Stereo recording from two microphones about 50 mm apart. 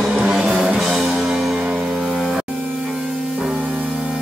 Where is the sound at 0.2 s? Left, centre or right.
Centre.